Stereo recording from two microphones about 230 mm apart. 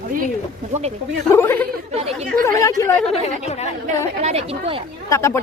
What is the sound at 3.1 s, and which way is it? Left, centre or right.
Speech, left.